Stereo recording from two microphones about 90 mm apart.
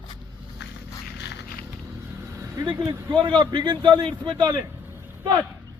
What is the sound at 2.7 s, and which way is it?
A man's voice, 60° right (ahead or behind).